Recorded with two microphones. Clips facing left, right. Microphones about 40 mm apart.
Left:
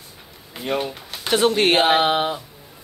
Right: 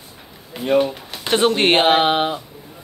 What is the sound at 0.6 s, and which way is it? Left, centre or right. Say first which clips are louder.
Speech: right 7 dB; centre.